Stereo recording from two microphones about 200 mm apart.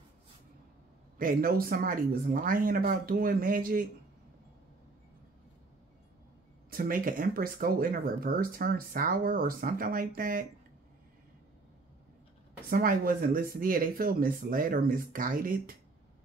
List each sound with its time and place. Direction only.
1.1 s speech: 45° right (ahead or behind)
6.7 s speech: 45° right (ahead or behind)
12.6 s speech: 45° right (ahead or behind)